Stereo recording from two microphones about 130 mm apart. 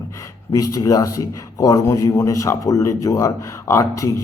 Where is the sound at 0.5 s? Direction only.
25° left (ahead or behind).